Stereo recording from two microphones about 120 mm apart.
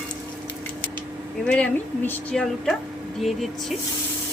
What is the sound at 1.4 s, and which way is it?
Speech, 10° left (ahead or behind).